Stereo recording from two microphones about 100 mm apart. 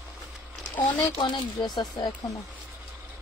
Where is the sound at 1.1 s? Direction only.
55° left (ahead or behind).